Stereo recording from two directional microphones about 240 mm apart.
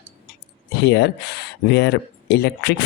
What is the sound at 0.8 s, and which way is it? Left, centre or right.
Speech, left.